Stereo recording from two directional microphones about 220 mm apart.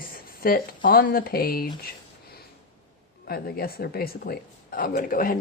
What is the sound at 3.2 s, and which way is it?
Speech, 45° left (ahead or behind).